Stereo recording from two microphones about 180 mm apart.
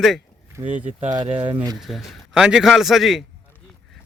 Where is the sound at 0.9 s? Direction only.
45° right (ahead or behind).